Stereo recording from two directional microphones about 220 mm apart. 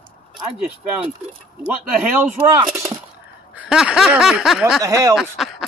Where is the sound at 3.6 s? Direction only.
5° right (ahead or behind).